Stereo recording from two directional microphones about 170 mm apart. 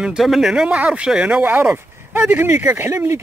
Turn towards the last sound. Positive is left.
turn(degrees=-15)  # may be behind; listen again after turning